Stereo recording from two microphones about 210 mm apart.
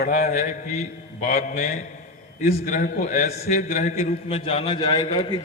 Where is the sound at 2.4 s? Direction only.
35° left (ahead or behind).